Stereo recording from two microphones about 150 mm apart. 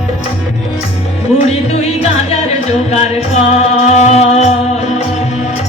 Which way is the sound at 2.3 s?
45° left (ahead or behind).